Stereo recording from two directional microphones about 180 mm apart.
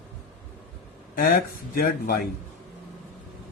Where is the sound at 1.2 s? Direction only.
55° left (ahead or behind).